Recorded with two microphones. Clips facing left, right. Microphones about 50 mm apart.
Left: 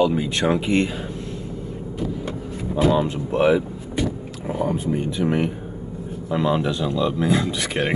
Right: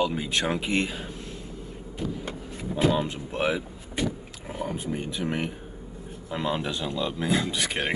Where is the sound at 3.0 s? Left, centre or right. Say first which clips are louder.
Left 8 dB; centre.